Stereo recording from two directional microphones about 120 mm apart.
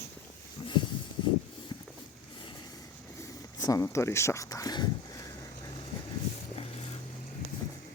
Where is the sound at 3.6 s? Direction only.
30° left (ahead or behind).